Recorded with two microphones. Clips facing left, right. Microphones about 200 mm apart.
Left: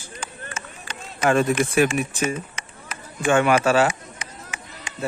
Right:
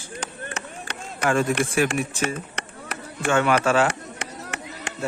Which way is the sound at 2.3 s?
65° right (ahead or behind).